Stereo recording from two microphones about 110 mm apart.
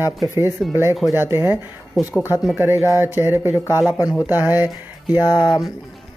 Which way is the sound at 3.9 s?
35° left (ahead or behind).